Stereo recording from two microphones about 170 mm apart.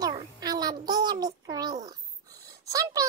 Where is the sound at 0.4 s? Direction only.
25° right (ahead or behind).